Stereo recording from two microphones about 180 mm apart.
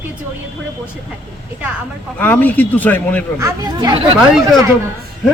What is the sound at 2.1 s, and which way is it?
Speech, 10° left (ahead or behind).